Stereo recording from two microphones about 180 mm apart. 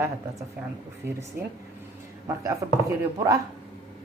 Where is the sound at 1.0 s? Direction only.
15° right (ahead or behind).